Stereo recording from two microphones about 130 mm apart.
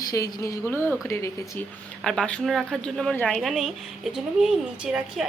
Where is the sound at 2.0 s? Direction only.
5° left (ahead or behind).